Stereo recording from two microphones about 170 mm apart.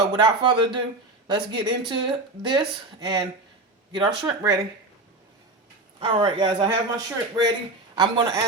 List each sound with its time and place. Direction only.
0.1 s speech: 25° right (ahead or behind)
6.0 s speech: 30° right (ahead or behind)